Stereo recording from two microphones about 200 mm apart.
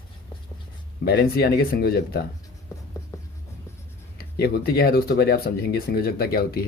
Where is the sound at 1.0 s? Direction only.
50° left (ahead or behind).